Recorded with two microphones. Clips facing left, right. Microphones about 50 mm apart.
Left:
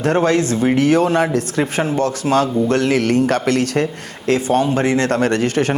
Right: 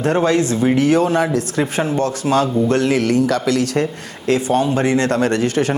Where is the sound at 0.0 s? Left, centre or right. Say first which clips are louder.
Even; left.